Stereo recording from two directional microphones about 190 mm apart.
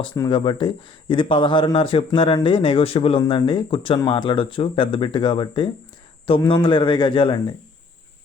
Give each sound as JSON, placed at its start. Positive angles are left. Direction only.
{"t": 0.2, "sound": "speech", "side_deg": 25}